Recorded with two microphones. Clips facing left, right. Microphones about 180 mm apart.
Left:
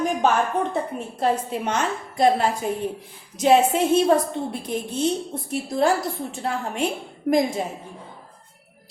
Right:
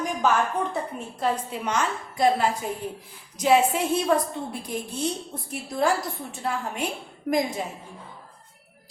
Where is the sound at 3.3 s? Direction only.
25° left (ahead or behind).